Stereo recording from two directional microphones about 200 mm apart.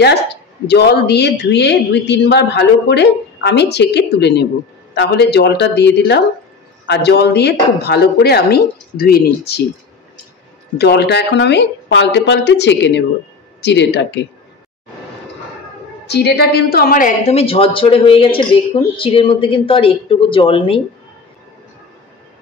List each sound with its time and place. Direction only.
0.7 s a man's voice: 55° left (ahead or behind)
10.8 s a man's voice: 55° left (ahead or behind)
16.1 s a woman's voice: 55° left (ahead or behind); by 20.8 s 25° left (ahead or behind)